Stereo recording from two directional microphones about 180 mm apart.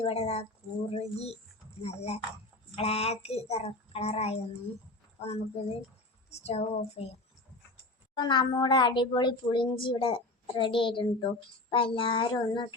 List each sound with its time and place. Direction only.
0.0 s speech: 35° left (ahead or behind)
8.1 s speech: 25° left (ahead or behind)